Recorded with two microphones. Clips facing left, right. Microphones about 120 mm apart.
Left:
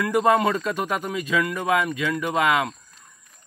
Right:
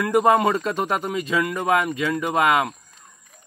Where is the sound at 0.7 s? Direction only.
35° right (ahead or behind).